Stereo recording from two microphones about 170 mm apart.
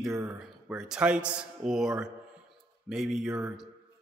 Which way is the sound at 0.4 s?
Centre (ahead or behind).